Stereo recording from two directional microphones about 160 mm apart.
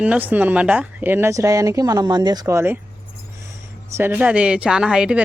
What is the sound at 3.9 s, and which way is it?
Speech, 10° right (ahead or behind).